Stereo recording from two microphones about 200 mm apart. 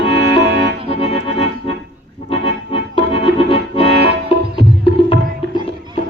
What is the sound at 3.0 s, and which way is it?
Music, 25° left (ahead or behind).